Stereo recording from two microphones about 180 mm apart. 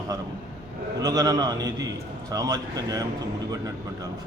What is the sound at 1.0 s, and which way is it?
A man's voice, 20° right (ahead or behind).